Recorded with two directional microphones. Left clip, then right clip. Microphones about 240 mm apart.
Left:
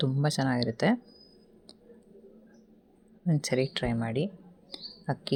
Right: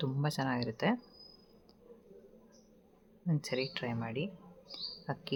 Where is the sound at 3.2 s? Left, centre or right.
Centre.